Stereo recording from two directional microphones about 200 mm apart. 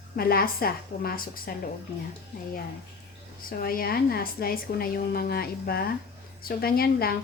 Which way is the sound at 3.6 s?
50° left (ahead or behind).